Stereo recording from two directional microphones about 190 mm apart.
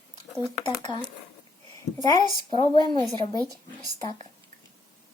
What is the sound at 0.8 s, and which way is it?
Speech, 25° left (ahead or behind).